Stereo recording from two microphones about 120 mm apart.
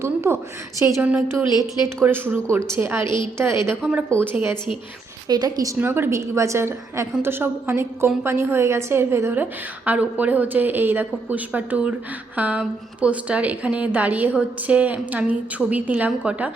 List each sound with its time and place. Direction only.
0.0 s a woman's voice: 20° right (ahead or behind)
1.0 s a woman's voice: 10° right (ahead or behind)
3.0 s a woman's voice: 40° left (ahead or behind)
3.3 s a woman's voice: 20° right (ahead or behind)
5.3 s a woman's voice: 35° right (ahead or behind)
5.8 s a woman's voice: 20° right (ahead or behind)